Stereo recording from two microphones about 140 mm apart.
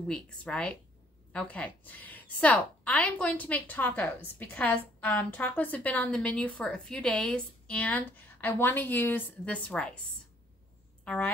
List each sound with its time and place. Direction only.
0.1 s a woman's voice: 5° left (ahead or behind)
11.1 s a woman's voice: 10° left (ahead or behind)